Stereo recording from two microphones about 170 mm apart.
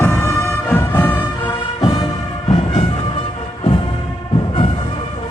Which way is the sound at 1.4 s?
30° left (ahead or behind).